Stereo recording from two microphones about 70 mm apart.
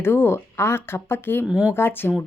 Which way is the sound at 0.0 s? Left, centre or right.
Left.